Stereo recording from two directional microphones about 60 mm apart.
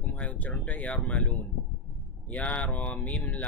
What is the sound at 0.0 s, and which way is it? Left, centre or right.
Speech, left.